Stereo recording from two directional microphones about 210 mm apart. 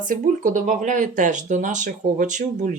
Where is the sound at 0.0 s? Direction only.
35° right (ahead or behind).